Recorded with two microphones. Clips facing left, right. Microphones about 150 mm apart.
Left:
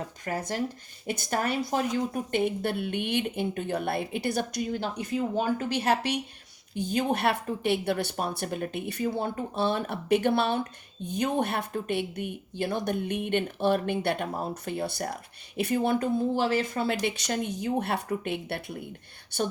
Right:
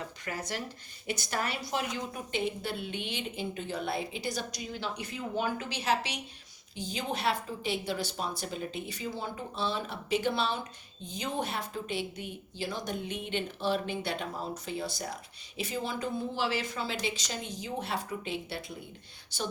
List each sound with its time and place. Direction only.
0.3 s a woman's voice: 50° left (ahead or behind)